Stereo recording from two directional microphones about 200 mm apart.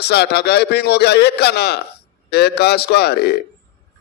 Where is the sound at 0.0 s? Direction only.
55° left (ahead or behind).